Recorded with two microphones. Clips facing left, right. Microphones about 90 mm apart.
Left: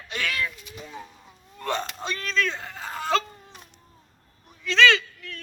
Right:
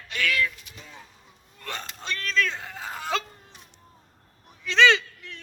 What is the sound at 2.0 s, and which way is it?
Speech, 10° left (ahead or behind).